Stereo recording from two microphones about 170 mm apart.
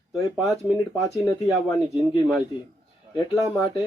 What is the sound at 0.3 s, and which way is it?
Speech, centre (ahead or behind).